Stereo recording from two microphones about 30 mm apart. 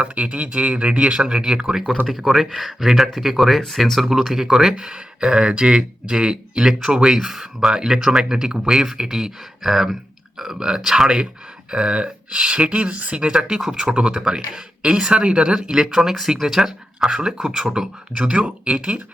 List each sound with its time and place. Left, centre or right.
0.0 s speech: right
2.0 s speech: centre
4.5 s speech: right
7.2 s speech: centre
7.7 s speech: right
9.9 s clicking: centre
10.9 s speech: right
12.6 s speech: right
13.1 s speech: right
14.8 s speech: right
15.7 s speech: centre
18.3 s speech: right